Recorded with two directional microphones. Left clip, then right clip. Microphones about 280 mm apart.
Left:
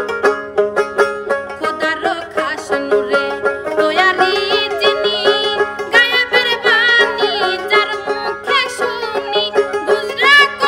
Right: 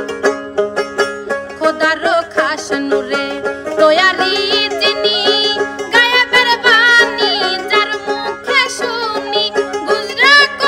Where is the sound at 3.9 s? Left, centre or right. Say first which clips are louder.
Right 1 dB; centre.